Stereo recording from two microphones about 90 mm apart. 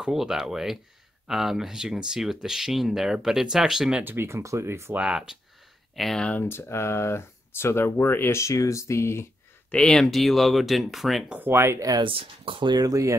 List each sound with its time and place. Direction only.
0.0 s speech: 5° right (ahead or behind)
4.0 s speech: 25° right (ahead or behind)
4.9 s speech: 10° right (ahead or behind)
6.4 s speech: 30° left (ahead or behind)
9.7 s speech: 10° left (ahead or behind)
11.2 s speech: 20° right (ahead or behind)
12.0 s speech: 80° right
12.7 s speech: 40° right (ahead or behind)